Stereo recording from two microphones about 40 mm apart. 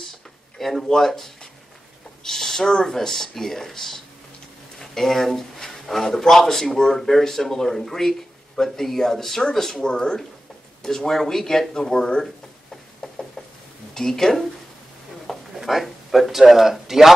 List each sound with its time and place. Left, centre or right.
0.6 s speech: centre
2.2 s a sound: centre
2.6 s speech: centre
13.0 s knock: centre
13.9 s speech: centre
15.2 s a sound: centre